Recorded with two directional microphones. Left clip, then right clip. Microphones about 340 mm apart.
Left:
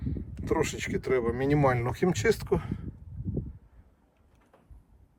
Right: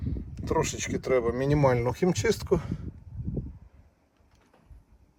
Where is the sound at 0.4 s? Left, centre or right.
Centre.